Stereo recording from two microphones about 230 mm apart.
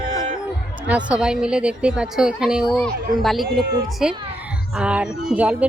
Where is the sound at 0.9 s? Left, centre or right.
Centre.